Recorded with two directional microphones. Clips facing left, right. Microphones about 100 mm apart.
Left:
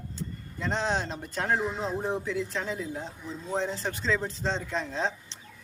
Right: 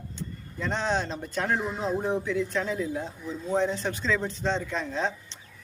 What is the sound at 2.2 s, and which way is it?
A man's voice, 30° left (ahead or behind).